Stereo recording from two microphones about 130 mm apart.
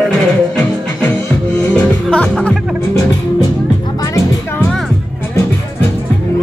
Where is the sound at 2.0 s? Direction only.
10° left (ahead or behind).